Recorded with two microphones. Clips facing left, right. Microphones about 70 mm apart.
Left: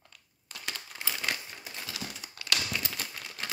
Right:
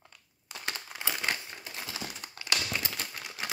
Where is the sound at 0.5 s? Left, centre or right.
Right.